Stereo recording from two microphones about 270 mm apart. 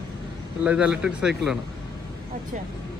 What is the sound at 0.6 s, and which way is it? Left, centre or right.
Speech, centre.